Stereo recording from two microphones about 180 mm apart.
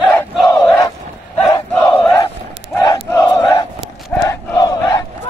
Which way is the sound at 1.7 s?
10° left (ahead or behind).